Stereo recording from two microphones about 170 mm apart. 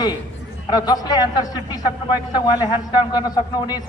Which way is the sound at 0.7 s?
25° left (ahead or behind).